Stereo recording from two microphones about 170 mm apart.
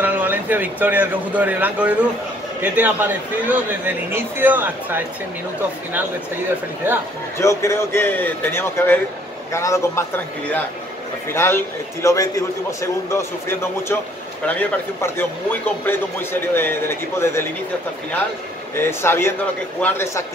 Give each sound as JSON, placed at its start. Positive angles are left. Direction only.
{"t": 0.0, "sound": "a man's voice", "side_deg": -10}
{"t": 7.3, "sound": "a man's voice", "side_deg": 15}
{"t": 18.8, "sound": "a man's voice", "side_deg": 15}